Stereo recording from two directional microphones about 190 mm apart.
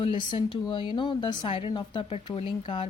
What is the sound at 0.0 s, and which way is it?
Speech, 25° left (ahead or behind).